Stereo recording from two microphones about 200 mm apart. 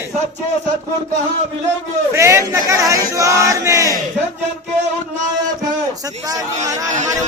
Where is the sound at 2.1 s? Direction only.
15° right (ahead or behind).